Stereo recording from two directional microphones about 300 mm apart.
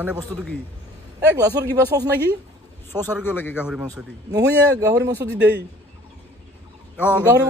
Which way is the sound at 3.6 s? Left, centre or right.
Centre.